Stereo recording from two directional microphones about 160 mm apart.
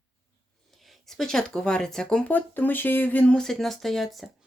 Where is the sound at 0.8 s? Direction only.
Centre (ahead or behind).